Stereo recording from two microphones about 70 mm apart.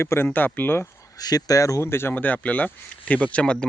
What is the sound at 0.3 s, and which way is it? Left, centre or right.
Speech, left.